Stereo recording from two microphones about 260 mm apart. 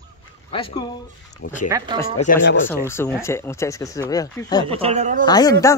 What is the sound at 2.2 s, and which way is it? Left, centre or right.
Speech, left.